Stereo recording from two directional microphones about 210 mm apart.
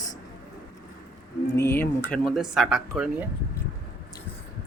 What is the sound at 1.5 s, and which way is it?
Speech, 10° left (ahead or behind).